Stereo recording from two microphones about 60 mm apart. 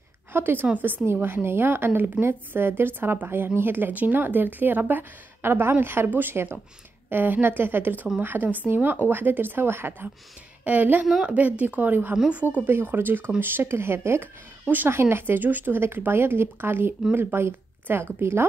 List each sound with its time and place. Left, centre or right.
0.3 s a woman's voice: right